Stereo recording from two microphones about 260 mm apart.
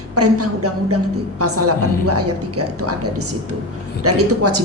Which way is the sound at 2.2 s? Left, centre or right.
Right.